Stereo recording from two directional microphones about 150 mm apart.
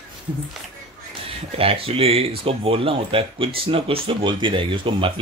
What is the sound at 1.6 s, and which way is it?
Speech, 40° right (ahead or behind).